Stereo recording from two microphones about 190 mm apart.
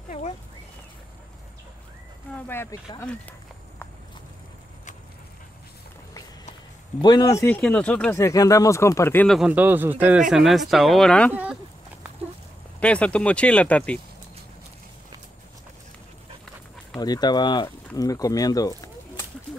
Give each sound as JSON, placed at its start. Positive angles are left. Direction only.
{"t": 2.3, "sound": "speech", "side_deg": 10}
{"t": 7.0, "sound": "speech", "side_deg": 20}
{"t": 8.2, "sound": "speech", "side_deg": 15}
{"t": 9.4, "sound": "speech", "side_deg": -10}
{"t": 12.8, "sound": "speech", "side_deg": 5}
{"t": 17.0, "sound": "speech", "side_deg": 20}